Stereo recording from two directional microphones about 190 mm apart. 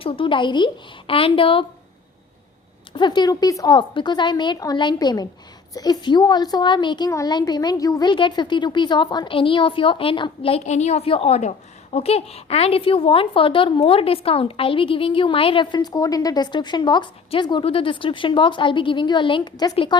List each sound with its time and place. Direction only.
0.0 s a woman's voice: 30° left (ahead or behind)
2.9 s a woman's voice: 25° left (ahead or behind)